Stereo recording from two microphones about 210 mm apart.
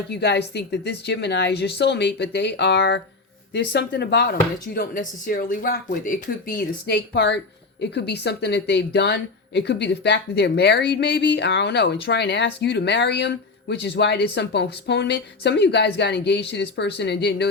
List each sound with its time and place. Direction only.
0.1 s speech: 55° left (ahead or behind)